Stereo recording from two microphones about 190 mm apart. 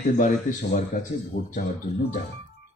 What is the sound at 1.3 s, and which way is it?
Speech, 55° left (ahead or behind).